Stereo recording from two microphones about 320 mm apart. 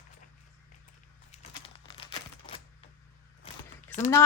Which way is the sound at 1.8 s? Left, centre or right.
Centre.